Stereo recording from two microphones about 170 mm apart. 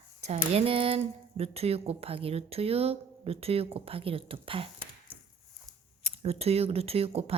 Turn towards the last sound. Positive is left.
turn(degrees=-35)  # may be behind; listen again after turning